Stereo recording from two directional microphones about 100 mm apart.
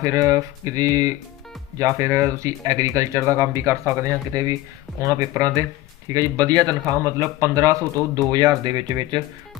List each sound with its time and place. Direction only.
0.0 s speech: 35° right (ahead or behind)